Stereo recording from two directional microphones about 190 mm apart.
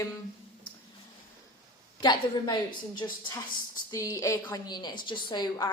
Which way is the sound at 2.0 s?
25° left (ahead or behind).